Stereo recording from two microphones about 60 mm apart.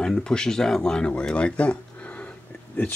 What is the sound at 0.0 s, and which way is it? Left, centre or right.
Speech, centre.